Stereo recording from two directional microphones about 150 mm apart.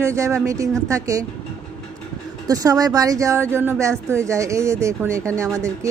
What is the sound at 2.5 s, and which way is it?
Speech, 25° right (ahead or behind).